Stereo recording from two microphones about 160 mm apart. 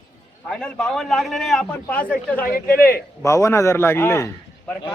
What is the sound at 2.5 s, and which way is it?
Speech, 65° left (ahead or behind).